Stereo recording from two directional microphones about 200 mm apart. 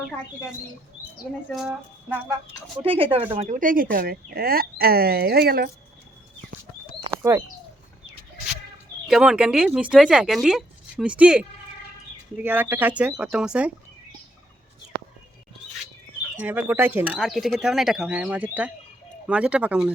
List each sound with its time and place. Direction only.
1.5 s speech: centre (ahead or behind)
2.7 s speech: 25° right (ahead or behind)
3.6 s speech: 45° right (ahead or behind)
7.1 s speech: 15° right (ahead or behind)
9.0 s speech: centre (ahead or behind)
16.4 s speech: 10° right (ahead or behind)